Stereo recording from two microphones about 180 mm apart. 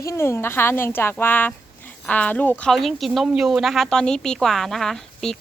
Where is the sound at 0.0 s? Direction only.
15° left (ahead or behind).